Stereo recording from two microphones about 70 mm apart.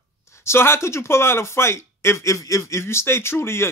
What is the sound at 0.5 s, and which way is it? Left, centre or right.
Speech, left.